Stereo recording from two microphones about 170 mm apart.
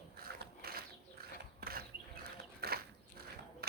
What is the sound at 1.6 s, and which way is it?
Mechanisms, 65° right (ahead or behind).